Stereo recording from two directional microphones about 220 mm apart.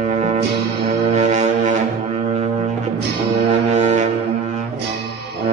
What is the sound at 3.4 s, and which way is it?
Brass instrument, 30° right (ahead or behind).